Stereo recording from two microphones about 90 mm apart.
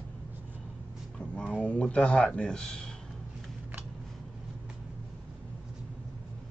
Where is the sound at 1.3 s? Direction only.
15° left (ahead or behind).